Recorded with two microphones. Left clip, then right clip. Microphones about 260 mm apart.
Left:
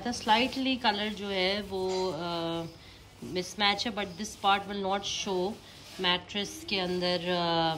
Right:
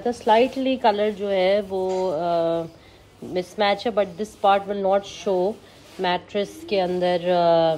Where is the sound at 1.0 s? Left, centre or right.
Left.